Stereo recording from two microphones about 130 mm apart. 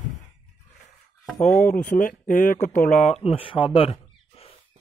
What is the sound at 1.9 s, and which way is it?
Speech, 90° left.